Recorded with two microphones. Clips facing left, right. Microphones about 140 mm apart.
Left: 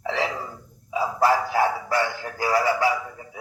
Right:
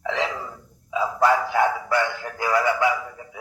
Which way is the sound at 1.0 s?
30° left (ahead or behind).